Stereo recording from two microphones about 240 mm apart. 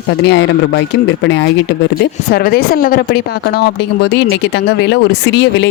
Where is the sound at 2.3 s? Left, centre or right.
Left.